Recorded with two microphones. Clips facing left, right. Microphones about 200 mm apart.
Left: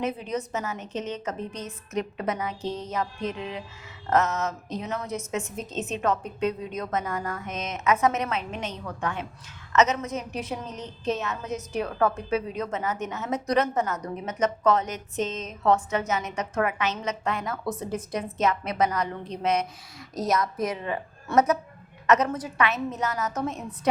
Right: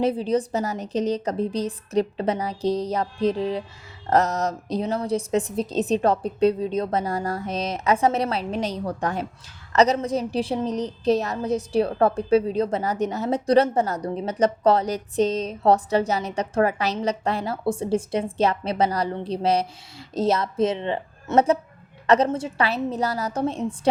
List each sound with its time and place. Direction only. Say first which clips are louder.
0.0 s a woman's voice: right 7 dB; 30° right (ahead or behind)